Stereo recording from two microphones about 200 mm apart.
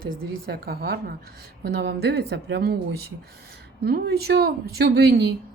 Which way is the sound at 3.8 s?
50° right (ahead or behind).